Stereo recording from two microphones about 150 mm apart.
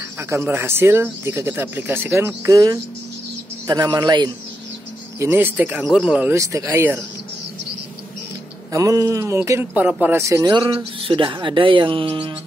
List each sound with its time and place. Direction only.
0.3 s speech: 15° right (ahead or behind)
5.2 s speech: 15° right (ahead or behind)
6.3 s speech: 20° right (ahead or behind)
8.7 s speech: 20° right (ahead or behind)
10.2 s speech: 25° right (ahead or behind)